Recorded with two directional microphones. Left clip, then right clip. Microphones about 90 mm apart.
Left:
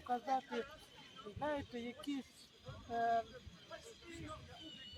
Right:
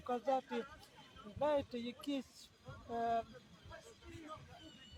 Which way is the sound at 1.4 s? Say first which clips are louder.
Right 5 dB; 35° right (ahead or behind).